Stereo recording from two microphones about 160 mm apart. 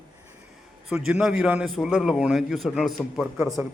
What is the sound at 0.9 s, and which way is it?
A man's voice, 5° right (ahead or behind).